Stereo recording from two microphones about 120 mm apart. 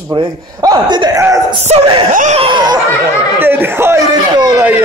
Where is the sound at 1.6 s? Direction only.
65° right (ahead or behind).